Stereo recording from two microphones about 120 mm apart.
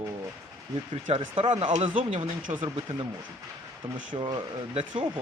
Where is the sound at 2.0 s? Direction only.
75° right (ahead or behind).